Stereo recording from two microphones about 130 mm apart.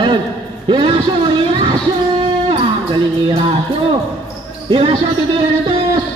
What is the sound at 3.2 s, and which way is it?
Music, 50° right (ahead or behind).